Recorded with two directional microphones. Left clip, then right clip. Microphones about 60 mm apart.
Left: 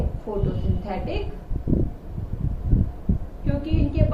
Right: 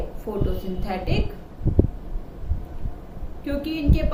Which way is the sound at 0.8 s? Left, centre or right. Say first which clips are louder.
Right 2 dB; right.